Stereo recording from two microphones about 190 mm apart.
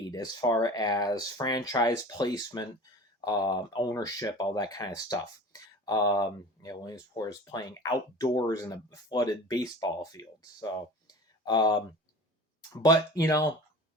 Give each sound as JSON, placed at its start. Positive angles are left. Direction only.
{"t": 0.1, "sound": "speech", "side_deg": 20}
{"t": 12.8, "sound": "speech", "side_deg": 20}